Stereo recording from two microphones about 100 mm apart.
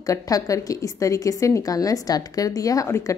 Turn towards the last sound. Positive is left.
turn(degrees=30)  # may be behind; listen again after turning